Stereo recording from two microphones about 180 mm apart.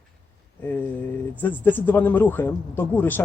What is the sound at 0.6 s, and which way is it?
Speech, 10° left (ahead or behind).